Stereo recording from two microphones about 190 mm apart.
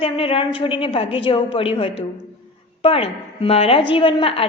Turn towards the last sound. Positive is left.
turn(degrees=30)  # may be behind; listen again after turning